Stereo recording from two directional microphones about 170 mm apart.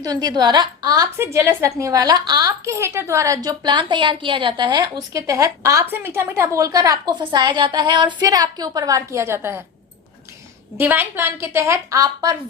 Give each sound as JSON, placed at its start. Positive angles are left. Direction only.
{"t": 0.0, "sound": "a woman's voice", "side_deg": -25}
{"t": 10.8, "sound": "a woman's voice", "side_deg": -10}